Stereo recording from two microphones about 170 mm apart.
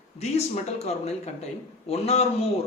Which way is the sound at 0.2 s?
40° left (ahead or behind).